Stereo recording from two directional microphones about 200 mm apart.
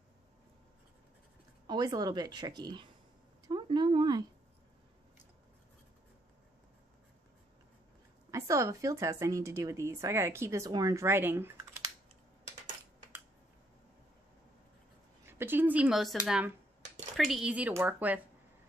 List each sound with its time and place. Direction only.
1.7 s speech: 20° right (ahead or behind)
3.4 s a sound: 25° right (ahead or behind)
8.3 s a woman's voice: 15° right (ahead or behind)
15.2 s a woman's voice: 10° right (ahead or behind)